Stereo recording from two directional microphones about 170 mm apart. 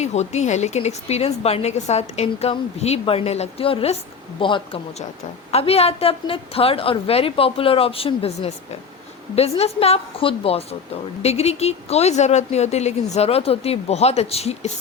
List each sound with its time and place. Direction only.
0.0 s a woman's voice: 40° left (ahead or behind)